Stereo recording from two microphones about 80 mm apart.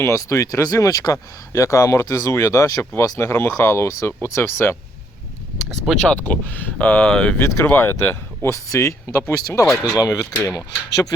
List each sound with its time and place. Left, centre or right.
0.0 s speech: left
6.0 s speech: centre
7.3 s speech: left
9.6 s speech: centre
9.9 s speech: left